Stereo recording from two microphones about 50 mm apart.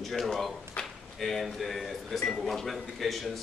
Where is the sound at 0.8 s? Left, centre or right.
Left.